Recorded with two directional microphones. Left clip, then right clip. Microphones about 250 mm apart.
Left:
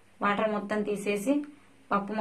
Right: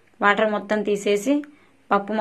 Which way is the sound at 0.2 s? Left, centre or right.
Right.